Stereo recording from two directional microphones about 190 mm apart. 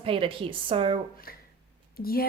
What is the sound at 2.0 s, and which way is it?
Speech, 50° left (ahead or behind).